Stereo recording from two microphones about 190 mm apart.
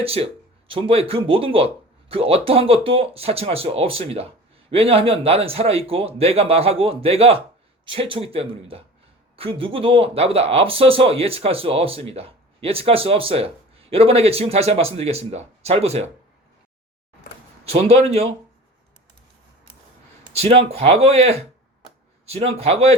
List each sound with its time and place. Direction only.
0.0 s speech: 30° right (ahead or behind)
17.7 s speech: 30° right (ahead or behind)
20.3 s speech: 30° right (ahead or behind)